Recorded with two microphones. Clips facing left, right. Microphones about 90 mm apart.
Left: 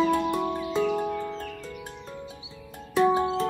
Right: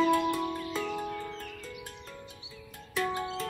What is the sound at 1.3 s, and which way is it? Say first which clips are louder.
Music: left 6 dB; 35° left (ahead or behind).